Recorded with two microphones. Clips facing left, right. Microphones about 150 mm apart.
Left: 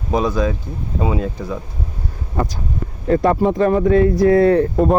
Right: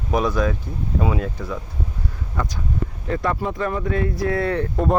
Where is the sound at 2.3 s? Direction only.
30° left (ahead or behind).